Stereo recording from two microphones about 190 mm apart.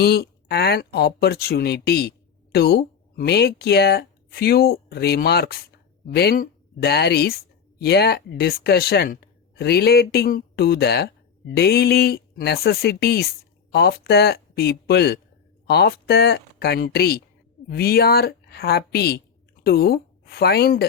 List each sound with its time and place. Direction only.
0.0 s speech: 55° left (ahead or behind)